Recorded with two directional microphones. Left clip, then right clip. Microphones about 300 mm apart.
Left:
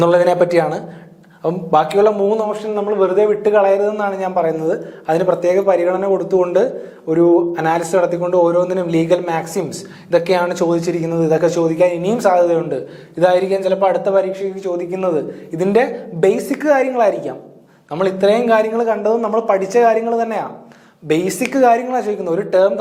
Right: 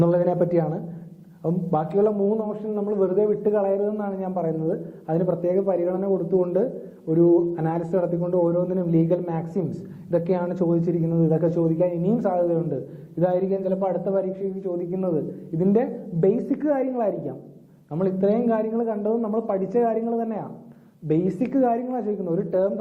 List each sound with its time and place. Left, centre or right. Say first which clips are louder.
0.0 s speech: left 9 dB; centre